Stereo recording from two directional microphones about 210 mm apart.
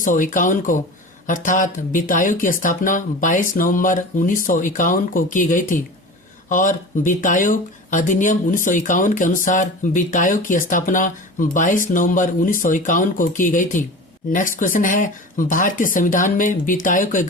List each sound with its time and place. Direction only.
0.0 s speech: 40° left (ahead or behind)